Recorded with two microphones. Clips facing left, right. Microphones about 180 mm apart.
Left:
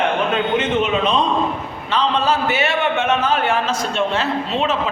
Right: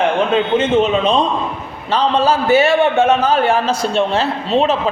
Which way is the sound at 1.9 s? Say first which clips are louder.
Right 4 dB; 35° right (ahead or behind).